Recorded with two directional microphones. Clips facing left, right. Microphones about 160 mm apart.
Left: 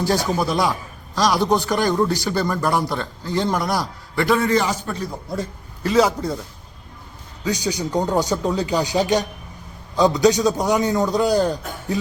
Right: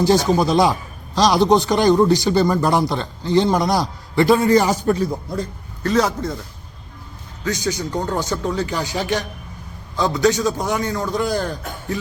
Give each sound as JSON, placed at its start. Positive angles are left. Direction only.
{"t": 0.1, "sound": "a man's voice", "side_deg": -25}
{"t": 5.4, "sound": "a man's voice", "side_deg": 5}
{"t": 7.4, "sound": "a man's voice", "side_deg": 15}